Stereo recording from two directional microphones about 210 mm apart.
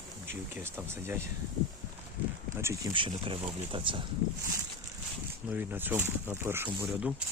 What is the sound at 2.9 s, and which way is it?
Speech, 25° right (ahead or behind).